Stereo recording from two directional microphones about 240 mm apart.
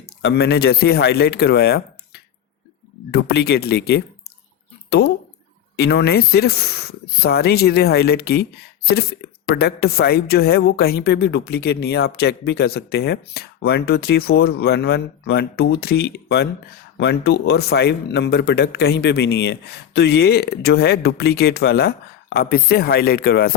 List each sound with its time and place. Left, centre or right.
0.0 s speech: left
3.1 s speech: left